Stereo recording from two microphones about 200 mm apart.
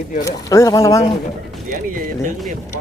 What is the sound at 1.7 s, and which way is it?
Speech, 45° right (ahead or behind).